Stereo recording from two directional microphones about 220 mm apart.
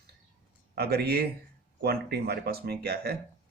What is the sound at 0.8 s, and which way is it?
Speech, 45° right (ahead or behind).